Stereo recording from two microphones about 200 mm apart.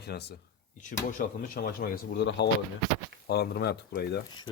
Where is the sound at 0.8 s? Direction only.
40° left (ahead or behind).